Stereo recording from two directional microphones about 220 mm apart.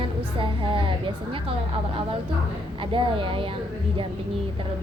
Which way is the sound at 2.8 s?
25° right (ahead or behind).